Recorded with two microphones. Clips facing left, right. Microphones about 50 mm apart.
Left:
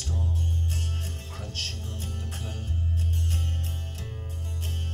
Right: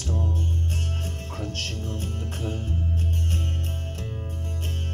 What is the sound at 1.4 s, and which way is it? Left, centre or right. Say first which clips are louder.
Music: right 5 dB; right.